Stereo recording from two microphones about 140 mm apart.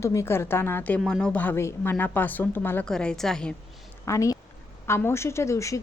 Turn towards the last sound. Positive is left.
turn(degrees=20)  # may be behind; listen again after turning